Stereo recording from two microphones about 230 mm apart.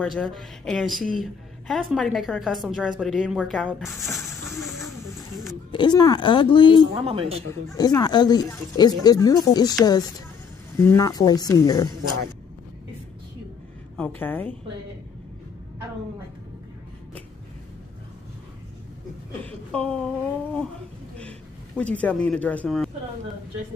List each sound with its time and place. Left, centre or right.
0.0 s a woman's voice: centre
3.0 s a sound: centre
5.7 s speech: centre
6.8 s speech: right
7.7 s speech: centre
10.8 s speech: centre
13.9 s speech: centre
19.4 s a woman's voice: centre
21.2 s speech: centre